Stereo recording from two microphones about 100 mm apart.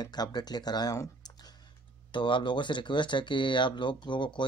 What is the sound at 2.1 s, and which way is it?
Speech, 55° left (ahead or behind).